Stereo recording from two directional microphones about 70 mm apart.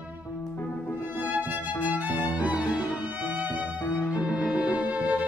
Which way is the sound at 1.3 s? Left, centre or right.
Right.